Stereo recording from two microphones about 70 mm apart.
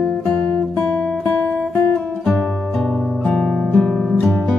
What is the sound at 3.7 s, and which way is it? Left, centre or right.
Music, centre.